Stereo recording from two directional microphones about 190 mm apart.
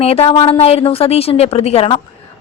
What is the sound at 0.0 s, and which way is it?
A woman's voice, 30° left (ahead or behind).